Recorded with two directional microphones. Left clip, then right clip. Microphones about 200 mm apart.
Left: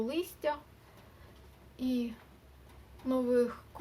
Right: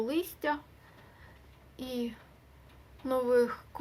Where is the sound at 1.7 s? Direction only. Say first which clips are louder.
Left 1 dB; 25° right (ahead or behind).